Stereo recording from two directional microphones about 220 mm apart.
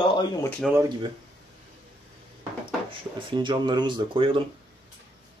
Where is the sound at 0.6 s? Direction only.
Centre (ahead or behind).